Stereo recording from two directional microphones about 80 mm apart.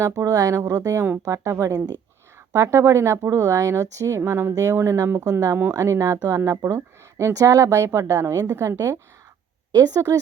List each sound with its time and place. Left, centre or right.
0.0 s speech: right
9.7 s speech: right